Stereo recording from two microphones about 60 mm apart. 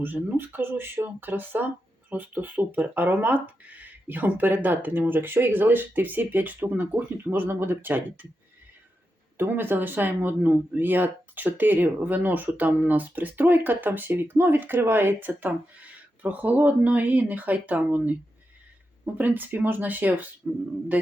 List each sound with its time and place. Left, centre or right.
0.0 s speech: right
9.4 s speech: right